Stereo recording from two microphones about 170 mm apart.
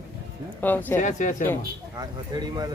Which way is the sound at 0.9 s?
50° left (ahead or behind).